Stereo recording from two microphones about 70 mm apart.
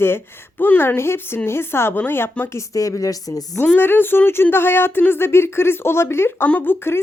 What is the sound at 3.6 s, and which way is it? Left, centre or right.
Speech, left.